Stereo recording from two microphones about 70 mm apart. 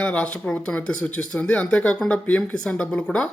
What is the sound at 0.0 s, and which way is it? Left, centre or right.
Speech, centre.